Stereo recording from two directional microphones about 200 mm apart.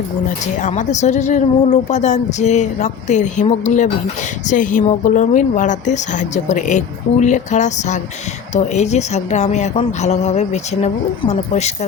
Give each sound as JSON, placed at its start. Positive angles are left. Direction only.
{"t": 0.6, "sound": "a woman's voice", "side_deg": 35}